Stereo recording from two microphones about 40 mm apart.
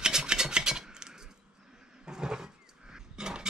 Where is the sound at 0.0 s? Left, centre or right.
Centre.